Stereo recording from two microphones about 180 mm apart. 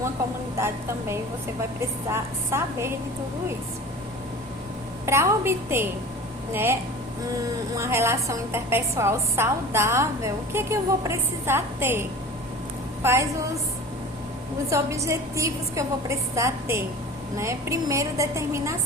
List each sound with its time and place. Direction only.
0.6 s a woman's voice: 15° right (ahead or behind)
5.0 s a woman's voice: 15° right (ahead or behind)
7.8 s a woman's voice: 15° right (ahead or behind)
14.7 s a woman's voice: 15° right (ahead or behind)